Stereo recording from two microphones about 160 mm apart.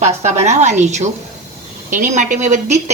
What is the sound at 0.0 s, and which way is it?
A woman's voice, 45° right (ahead or behind).